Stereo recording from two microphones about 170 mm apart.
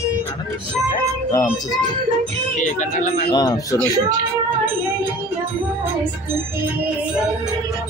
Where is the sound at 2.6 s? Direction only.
45° left (ahead or behind).